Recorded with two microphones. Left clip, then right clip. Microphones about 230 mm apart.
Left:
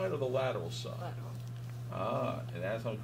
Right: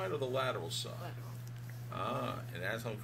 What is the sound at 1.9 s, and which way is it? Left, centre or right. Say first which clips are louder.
Speech: left 3 dB; right.